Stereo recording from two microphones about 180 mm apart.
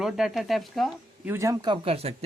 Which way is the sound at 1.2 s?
15° right (ahead or behind).